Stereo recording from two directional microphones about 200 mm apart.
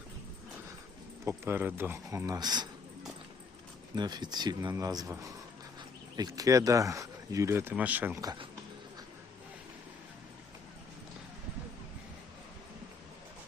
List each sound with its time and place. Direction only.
1.2 s speech: 10° right (ahead or behind)
3.9 s a man's voice: 20° right (ahead or behind)